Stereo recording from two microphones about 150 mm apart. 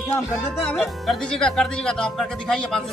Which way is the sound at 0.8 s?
5° left (ahead or behind).